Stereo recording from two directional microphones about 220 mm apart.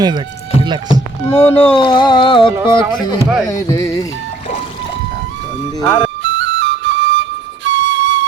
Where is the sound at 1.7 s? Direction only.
25° left (ahead or behind).